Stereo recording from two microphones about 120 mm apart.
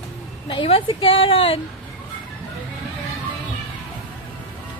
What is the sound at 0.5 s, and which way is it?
Speech, 45° left (ahead or behind).